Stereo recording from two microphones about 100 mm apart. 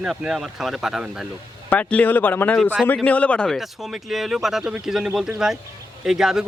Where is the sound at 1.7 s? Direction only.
15° left (ahead or behind).